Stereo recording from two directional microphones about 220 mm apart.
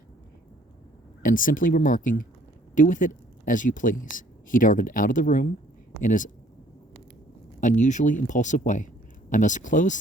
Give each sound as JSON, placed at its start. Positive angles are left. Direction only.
{"t": 1.2, "sound": "speech", "side_deg": 40}
{"t": 7.6, "sound": "speech", "side_deg": 35}